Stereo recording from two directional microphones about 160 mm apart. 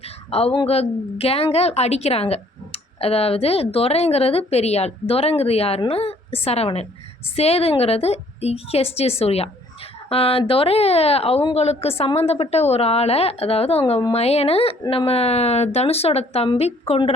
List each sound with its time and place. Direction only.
0.3 s a woman's voice: 40° left (ahead or behind)